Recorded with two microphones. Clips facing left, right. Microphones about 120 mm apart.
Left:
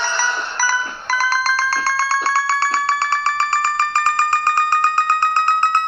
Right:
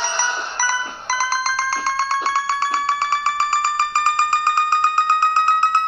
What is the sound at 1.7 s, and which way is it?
Doorbell, 15° right (ahead or behind).